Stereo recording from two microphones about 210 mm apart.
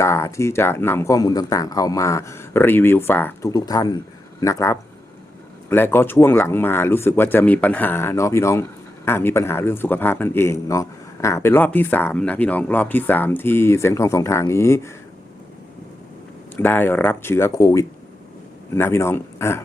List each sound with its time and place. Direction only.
0.0 s a man's voice: 15° left (ahead or behind)
16.6 s a man's voice: 10° left (ahead or behind)